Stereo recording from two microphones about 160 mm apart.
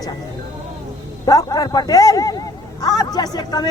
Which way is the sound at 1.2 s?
25° left (ahead or behind).